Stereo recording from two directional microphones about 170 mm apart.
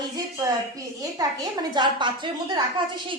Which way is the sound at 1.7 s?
25° right (ahead or behind).